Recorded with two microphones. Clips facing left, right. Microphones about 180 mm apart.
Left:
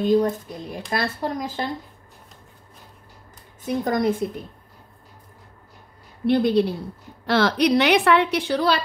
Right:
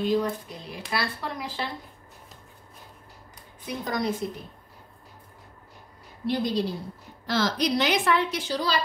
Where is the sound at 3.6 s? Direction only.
50° left (ahead or behind).